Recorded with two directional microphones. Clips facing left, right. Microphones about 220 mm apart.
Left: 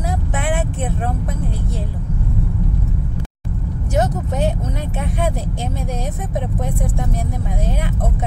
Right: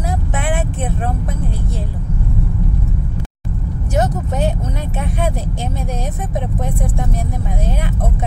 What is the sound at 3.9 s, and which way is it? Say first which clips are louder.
Speech: right 1 dB; 20° left (ahead or behind).